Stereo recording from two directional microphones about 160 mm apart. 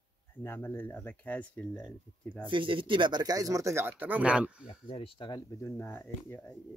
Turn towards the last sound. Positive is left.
turn(degrees=15)  # may be behind; listen again after turning